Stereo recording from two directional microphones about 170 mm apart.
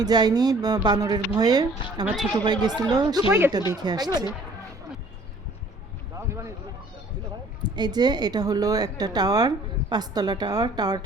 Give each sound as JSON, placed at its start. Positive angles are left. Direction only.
{"t": 0.0, "sound": "speech", "side_deg": -25}
{"t": 2.0, "sound": "a woman's voice", "side_deg": 0}
{"t": 2.3, "sound": "speech", "side_deg": -25}
{"t": 3.2, "sound": "speech", "side_deg": -5}
{"t": 3.7, "sound": "speech", "side_deg": -25}
{"t": 6.1, "sound": "a sound", "side_deg": -15}
{"t": 7.6, "sound": "speech", "side_deg": -25}